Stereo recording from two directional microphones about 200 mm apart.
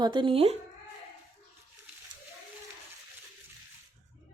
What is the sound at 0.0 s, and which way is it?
Speech, 25° right (ahead or behind).